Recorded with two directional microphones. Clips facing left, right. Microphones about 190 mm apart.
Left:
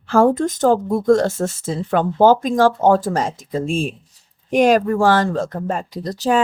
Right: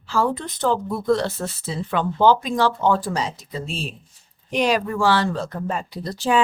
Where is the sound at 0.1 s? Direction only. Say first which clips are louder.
Left 8 dB; 50° left (ahead or behind).